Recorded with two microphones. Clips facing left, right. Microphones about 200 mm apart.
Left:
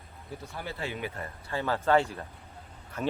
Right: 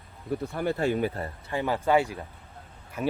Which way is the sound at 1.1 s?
30° right (ahead or behind).